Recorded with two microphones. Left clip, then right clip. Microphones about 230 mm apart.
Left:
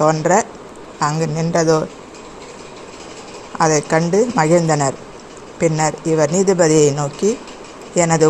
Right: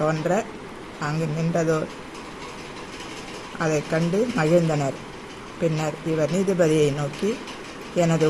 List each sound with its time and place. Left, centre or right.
0.0 s speech: left
3.6 s speech: left